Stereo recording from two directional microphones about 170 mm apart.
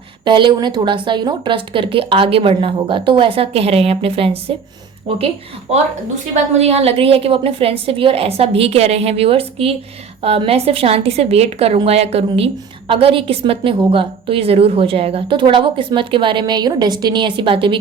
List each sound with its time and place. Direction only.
0.3 s a woman's voice: 25° right (ahead or behind)